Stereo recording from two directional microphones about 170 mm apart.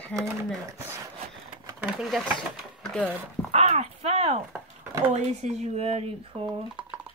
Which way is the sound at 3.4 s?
40° right (ahead or behind).